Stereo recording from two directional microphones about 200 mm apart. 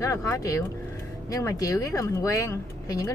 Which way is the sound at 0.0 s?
15° left (ahead or behind).